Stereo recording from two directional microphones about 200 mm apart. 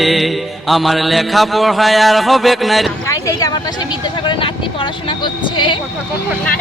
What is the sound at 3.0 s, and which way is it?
Speech, 15° left (ahead or behind).